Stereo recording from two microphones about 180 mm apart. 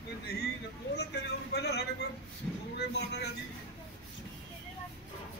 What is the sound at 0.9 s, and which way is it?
Speech, 65° left (ahead or behind).